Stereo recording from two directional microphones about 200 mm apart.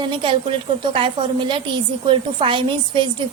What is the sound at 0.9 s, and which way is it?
A woman's voice, 25° right (ahead or behind).